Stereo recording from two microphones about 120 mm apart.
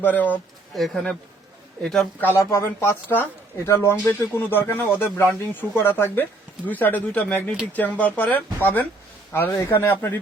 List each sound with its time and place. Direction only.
0.0 s speech: 15° left (ahead or behind)
0.8 s speech: centre (ahead or behind)
2.3 s speech: 25° left (ahead or behind)